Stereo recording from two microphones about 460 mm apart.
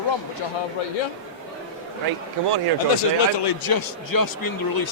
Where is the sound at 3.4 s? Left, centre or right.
Left.